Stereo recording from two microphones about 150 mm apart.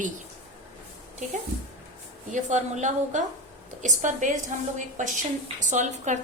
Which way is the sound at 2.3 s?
55° right (ahead or behind).